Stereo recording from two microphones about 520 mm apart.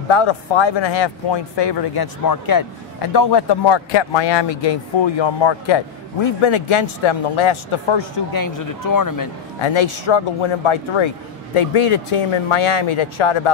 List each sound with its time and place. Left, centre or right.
0.1 s speech: left
8.3 s speech: left
9.6 s speech: left